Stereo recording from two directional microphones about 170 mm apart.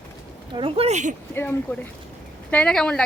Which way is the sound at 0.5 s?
35° right (ahead or behind).